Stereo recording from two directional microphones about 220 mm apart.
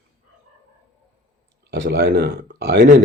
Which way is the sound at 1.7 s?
50° right (ahead or behind).